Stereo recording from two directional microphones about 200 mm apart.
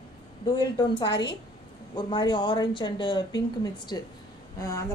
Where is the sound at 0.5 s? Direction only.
20° left (ahead or behind).